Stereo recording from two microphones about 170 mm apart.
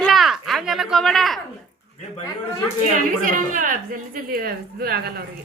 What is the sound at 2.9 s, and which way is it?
A woman's voice, 50° right (ahead or behind).